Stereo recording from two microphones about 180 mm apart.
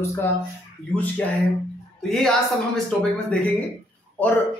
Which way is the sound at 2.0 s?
5° left (ahead or behind).